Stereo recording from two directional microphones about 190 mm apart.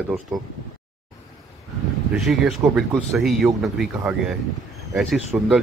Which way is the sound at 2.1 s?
Centre (ahead or behind).